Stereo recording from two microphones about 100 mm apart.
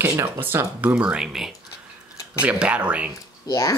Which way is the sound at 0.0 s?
20° right (ahead or behind).